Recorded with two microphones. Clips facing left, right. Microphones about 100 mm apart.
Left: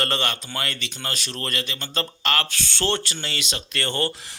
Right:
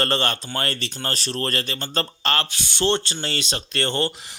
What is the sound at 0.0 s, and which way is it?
Speech, 35° right (ahead or behind).